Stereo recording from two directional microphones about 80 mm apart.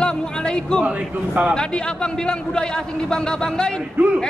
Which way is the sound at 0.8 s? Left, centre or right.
Centre.